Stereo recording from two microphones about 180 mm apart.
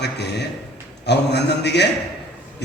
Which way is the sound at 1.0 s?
70° left (ahead or behind).